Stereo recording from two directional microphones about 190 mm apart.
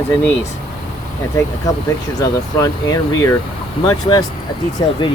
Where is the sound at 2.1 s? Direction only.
20° left (ahead or behind).